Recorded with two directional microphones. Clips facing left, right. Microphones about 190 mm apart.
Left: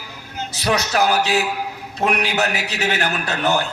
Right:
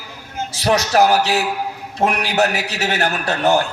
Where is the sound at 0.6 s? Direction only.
40° right (ahead or behind).